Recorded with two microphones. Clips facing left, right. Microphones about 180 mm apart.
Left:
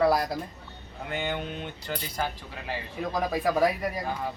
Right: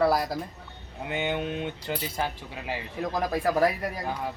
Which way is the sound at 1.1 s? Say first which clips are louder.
Right 3 dB; 20° right (ahead or behind).